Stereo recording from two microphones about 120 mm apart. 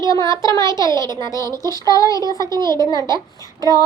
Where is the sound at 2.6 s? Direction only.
35° right (ahead or behind).